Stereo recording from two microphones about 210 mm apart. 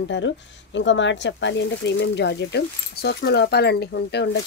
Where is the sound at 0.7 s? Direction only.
60° left (ahead or behind).